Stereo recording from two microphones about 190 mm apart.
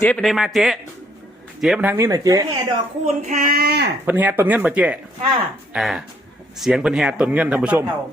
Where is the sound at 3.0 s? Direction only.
40° right (ahead or behind); by 3.9 s 55° right (ahead or behind).